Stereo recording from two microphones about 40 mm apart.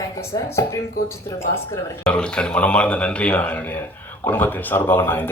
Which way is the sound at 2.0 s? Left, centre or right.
Left.